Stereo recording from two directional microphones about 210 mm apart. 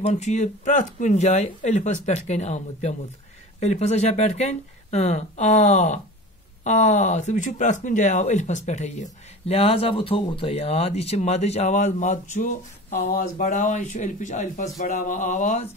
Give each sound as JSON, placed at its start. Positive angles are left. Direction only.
{"t": 0.0, "sound": "speech", "side_deg": 35}